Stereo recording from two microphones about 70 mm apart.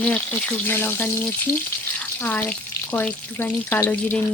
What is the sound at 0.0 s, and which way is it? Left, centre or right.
Speech, centre.